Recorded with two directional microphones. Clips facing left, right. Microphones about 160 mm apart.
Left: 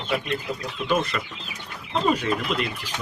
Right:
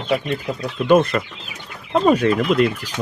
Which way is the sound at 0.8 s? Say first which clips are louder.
Right 10 dB; 50° right (ahead or behind).